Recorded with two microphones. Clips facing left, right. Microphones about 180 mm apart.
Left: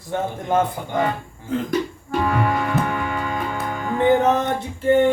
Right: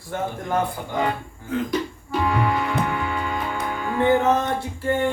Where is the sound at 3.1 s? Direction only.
45° left (ahead or behind).